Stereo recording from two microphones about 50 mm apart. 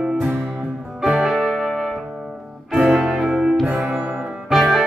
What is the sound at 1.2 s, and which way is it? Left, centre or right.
Music, centre.